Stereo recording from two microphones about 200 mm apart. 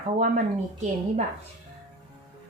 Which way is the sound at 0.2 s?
40° right (ahead or behind).